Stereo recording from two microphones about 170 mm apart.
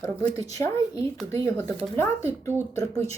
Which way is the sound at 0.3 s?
20° left (ahead or behind).